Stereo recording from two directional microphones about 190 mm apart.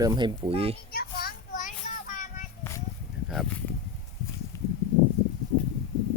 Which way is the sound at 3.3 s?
Centre (ahead or behind).